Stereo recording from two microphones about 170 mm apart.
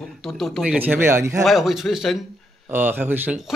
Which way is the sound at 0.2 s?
Centre (ahead or behind).